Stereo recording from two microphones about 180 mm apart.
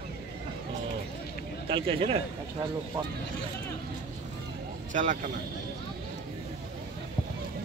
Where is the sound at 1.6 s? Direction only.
30° right (ahead or behind).